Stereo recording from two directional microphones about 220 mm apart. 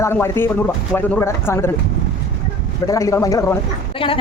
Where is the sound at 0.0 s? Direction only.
10° left (ahead or behind).